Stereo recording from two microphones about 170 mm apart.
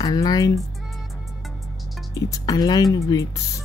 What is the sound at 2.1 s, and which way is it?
Speech, 20° left (ahead or behind).